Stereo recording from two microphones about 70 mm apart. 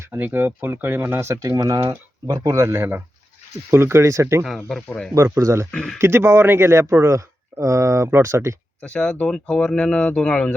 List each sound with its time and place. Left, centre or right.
0.0 s speech: right
2.5 s speech: right
4.4 s speech: centre
4.9 s speech: centre
5.1 s speech: right
5.7 s speech: centre
6.0 s speech: right
8.8 s speech: centre